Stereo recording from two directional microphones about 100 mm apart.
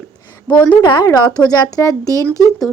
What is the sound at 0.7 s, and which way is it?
Speech, 50° left (ahead or behind).